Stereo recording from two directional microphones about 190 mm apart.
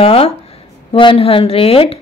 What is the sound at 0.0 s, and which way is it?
Speech, 30° left (ahead or behind).